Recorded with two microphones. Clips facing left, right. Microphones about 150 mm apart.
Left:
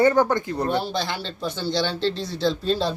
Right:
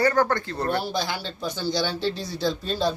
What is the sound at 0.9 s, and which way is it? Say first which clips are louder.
Speech: left 1 dB; 5° right (ahead or behind).